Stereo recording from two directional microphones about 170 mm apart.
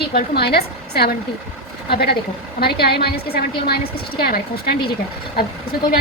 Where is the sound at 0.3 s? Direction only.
65° left (ahead or behind).